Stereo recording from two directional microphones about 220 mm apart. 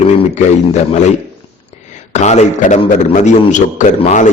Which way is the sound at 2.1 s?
30° left (ahead or behind).